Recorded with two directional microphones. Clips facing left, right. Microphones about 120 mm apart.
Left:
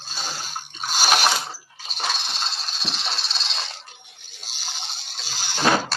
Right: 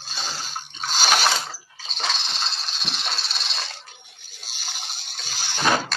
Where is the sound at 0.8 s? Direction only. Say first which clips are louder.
Left 1 dB; 10° left (ahead or behind).